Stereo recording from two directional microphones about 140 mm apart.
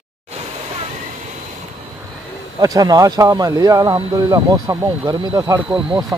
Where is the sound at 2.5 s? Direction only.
25° right (ahead or behind).